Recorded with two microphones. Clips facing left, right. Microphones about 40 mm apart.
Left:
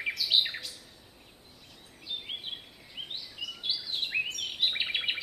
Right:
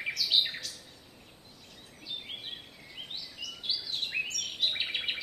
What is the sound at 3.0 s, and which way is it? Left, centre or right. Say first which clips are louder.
Bird vocalization: left 3 dB; left.